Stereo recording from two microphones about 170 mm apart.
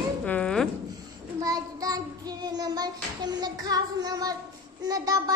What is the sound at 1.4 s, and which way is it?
Child singing, 20° right (ahead or behind).